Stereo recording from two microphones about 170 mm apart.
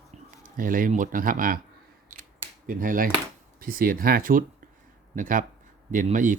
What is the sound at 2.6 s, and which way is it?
Speech, 55° right (ahead or behind).